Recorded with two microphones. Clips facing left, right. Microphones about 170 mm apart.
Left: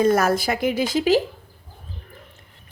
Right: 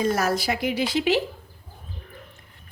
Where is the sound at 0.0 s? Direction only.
50° left (ahead or behind).